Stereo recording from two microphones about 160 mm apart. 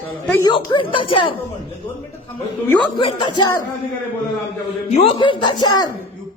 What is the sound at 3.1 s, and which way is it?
Speech, 30° left (ahead or behind).